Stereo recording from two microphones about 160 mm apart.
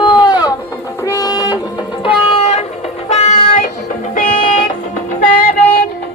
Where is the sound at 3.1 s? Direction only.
45° left (ahead or behind).